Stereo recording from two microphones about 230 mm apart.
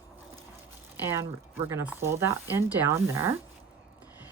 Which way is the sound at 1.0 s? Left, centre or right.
Centre.